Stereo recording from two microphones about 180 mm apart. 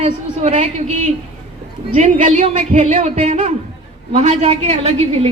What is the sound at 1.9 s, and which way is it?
A woman's voice, 40° right (ahead or behind).